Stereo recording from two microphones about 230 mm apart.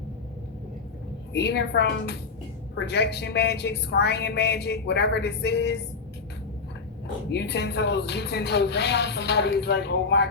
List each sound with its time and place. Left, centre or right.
1.3 s speech: left
7.3 s speech: left